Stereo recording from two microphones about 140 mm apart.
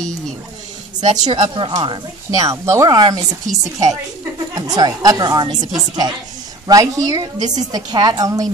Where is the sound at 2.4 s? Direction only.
20° right (ahead or behind).